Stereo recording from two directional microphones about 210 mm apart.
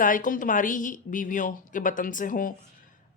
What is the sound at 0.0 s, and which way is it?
Speech, 40° left (ahead or behind).